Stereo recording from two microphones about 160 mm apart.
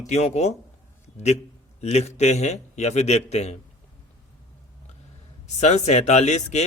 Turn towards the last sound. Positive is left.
turn(degrees=45)  # may be behind; listen again after turning